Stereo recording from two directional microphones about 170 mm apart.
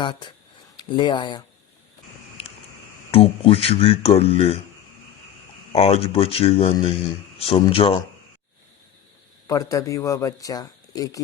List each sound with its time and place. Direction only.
0.0 s speech: 25° left (ahead or behind)
2.4 s a sound: 40° left (ahead or behind)
3.1 s speech: 35° left (ahead or behind)
5.7 s speech: 35° left (ahead or behind)
9.5 s speech: 20° left (ahead or behind)